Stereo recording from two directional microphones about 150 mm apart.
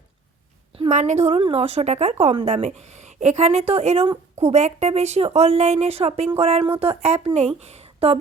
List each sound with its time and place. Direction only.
0.9 s a woman's voice: 50° right (ahead or behind)